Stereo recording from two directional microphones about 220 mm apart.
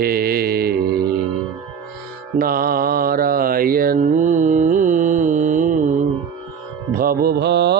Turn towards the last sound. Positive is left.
turn(degrees=-50)  # may be behind; listen again after turning